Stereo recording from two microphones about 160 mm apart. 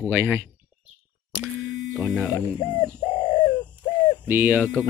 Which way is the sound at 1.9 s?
10° right (ahead or behind).